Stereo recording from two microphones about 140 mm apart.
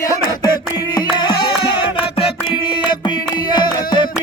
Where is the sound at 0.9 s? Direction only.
30° left (ahead or behind).